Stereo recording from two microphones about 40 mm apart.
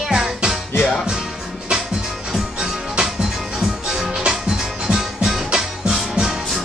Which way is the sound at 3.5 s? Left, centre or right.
Centre.